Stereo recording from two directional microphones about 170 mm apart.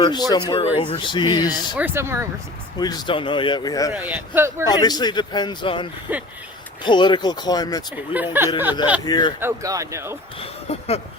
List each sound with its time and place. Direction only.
0.0 s speech: 25° left (ahead or behind)
1.7 s a man's voice: 10° right (ahead or behind)
2.7 s speech: 25° left (ahead or behind)
3.9 s a man's voice: 10° right (ahead or behind)
4.6 s speech: 25° left (ahead or behind)
6.1 s a man's voice: 10° right (ahead or behind)
6.8 s speech: 25° left (ahead or behind)
8.1 s a man's voice: 10° right (ahead or behind)
9.0 s speech: 25° left (ahead or behind)
9.4 s speech: 20° right (ahead or behind)
10.4 s speech: 35° left (ahead or behind)